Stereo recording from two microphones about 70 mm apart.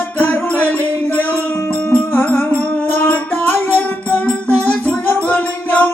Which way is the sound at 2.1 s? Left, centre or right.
Left.